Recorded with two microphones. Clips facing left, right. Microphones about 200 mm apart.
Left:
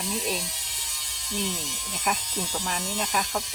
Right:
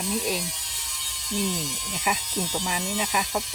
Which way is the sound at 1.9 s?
5° right (ahead or behind).